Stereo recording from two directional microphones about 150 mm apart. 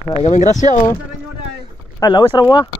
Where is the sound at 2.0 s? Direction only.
30° left (ahead or behind).